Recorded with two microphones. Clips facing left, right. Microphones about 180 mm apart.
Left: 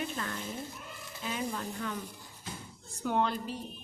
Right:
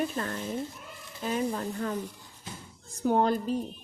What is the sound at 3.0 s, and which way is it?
Speech, 40° right (ahead or behind).